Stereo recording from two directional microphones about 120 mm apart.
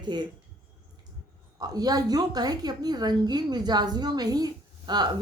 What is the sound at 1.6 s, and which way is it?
A woman's voice, 35° right (ahead or behind).